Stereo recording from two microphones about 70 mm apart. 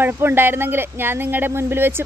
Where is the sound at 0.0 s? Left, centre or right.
Right.